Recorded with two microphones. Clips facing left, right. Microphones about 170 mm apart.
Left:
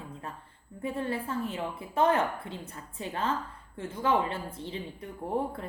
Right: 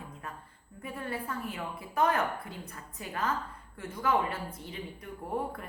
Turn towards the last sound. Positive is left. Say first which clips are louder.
# left 3 dB
turn(degrees=25)  # may be behind; listen again after turning